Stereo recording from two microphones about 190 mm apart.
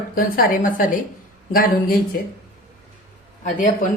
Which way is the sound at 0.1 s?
50° left (ahead or behind).